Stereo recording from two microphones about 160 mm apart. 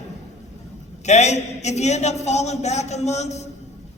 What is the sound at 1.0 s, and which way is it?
A man's voice, 45° left (ahead or behind).